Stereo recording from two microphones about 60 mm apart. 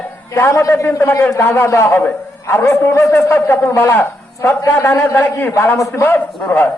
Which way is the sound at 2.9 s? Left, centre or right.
Left.